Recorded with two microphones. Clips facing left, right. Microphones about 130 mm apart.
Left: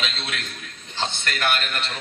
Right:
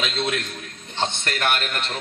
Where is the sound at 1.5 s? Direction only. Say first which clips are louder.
Right 1 dB; 45° right (ahead or behind).